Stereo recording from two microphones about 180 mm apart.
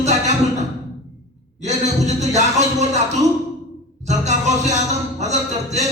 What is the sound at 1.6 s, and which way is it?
Speech, 40° right (ahead or behind).